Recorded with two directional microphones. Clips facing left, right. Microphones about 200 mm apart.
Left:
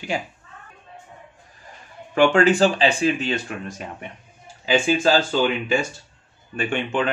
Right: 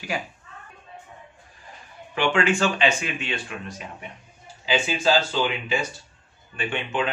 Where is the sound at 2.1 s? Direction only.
40° left (ahead or behind).